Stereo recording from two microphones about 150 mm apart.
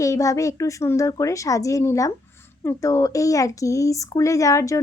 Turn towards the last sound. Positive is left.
turn(degrees=20)  # may be behind; listen again after turning